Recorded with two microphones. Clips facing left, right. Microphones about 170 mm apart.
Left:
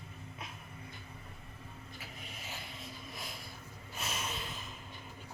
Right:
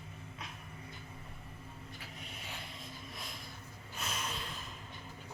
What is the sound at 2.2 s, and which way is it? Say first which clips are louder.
Vehicle: even; centre (ahead or behind).